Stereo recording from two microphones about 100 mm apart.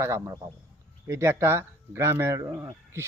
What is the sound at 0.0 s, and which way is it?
Speech, 30° right (ahead or behind).